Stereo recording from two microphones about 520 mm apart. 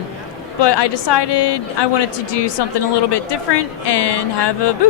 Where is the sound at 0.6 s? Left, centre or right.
Left.